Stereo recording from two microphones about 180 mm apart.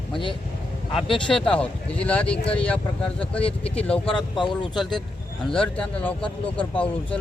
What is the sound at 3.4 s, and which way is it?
Speech, 30° left (ahead or behind).